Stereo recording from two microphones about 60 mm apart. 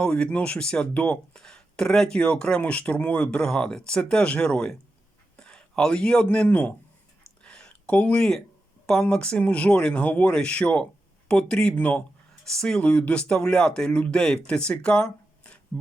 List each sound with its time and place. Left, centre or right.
0.0 s speech: centre
3.4 s speech: centre
7.4 s a sound: centre
8.9 s speech: centre
12.5 s speech: centre
12.8 s speech: left